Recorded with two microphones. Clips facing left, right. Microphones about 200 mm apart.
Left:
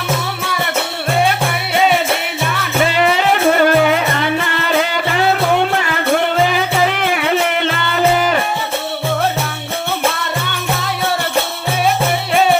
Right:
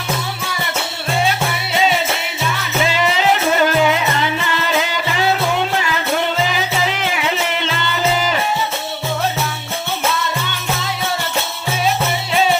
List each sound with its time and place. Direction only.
1.7 s music: 55° left (ahead or behind)
10.1 s music: 55° left (ahead or behind)